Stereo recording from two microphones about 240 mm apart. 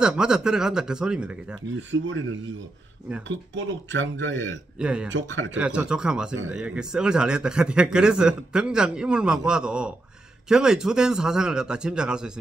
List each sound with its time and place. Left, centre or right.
0.0 s a man's voice: centre
1.8 s speech: right
4.7 s a man's voice: centre
5.1 s speech: right
5.6 s a man's voice: centre